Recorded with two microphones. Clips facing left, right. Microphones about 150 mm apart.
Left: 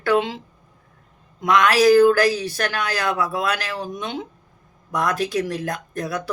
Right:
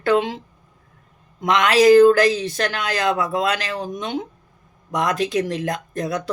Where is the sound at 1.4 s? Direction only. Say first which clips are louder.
Right 1 dB; 20° right (ahead or behind).